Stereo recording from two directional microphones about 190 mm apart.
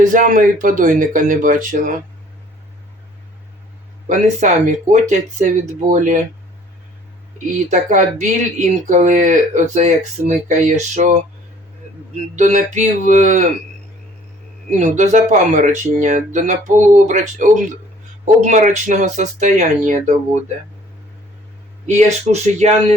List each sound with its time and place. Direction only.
0.0 s speech: 45° right (ahead or behind)
4.0 s speech: 40° right (ahead or behind)
7.7 s speech: 40° right (ahead or behind)
12.4 s speech: 40° right (ahead or behind)
14.7 s speech: 40° right (ahead or behind)
21.8 s speech: 35° right (ahead or behind)